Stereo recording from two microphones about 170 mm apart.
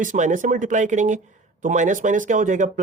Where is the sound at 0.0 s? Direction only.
50° right (ahead or behind).